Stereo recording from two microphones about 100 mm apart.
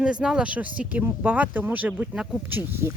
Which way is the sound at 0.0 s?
10° right (ahead or behind).